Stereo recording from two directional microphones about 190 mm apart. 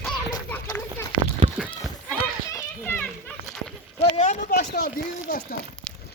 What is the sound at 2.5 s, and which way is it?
Children playing, 15° left (ahead or behind).